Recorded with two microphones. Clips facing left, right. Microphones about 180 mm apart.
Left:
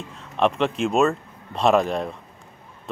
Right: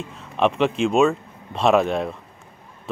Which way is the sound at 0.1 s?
Centre (ahead or behind).